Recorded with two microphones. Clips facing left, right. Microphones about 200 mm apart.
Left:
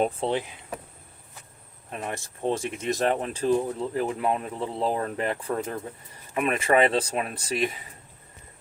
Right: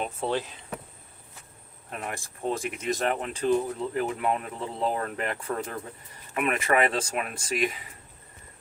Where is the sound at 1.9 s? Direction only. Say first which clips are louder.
Left 2 dB; 25° left (ahead or behind).